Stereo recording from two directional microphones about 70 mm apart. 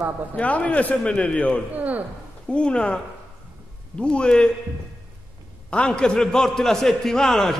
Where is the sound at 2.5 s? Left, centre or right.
Centre.